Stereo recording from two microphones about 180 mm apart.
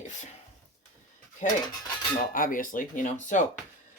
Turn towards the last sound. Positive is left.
turn(degrees=45)  # may be behind; listen again after turning